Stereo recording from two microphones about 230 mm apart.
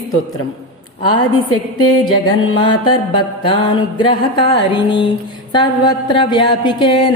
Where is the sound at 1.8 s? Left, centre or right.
Centre.